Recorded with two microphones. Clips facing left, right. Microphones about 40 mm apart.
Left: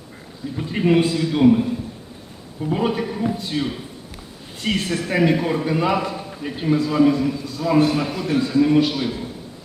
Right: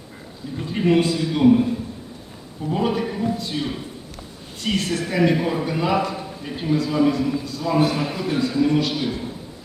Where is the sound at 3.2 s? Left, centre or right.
Left.